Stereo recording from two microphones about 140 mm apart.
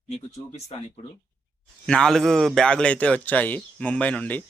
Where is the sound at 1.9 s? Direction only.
5° left (ahead or behind).